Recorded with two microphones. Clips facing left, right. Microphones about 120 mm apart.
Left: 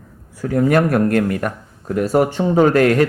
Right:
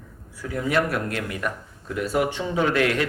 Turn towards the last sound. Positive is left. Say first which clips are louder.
# left 9 dB
turn(degrees=45)  # may be behind; listen again after turning